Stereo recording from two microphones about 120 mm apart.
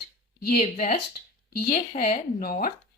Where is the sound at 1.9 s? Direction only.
70° left (ahead or behind).